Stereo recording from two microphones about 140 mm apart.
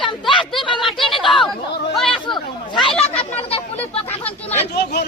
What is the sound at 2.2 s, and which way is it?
Chatter, 35° left (ahead or behind).